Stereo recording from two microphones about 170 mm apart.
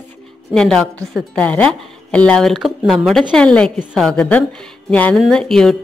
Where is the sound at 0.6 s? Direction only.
5° left (ahead or behind).